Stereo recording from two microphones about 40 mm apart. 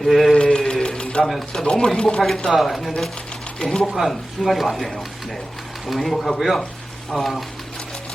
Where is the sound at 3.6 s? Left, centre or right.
Centre.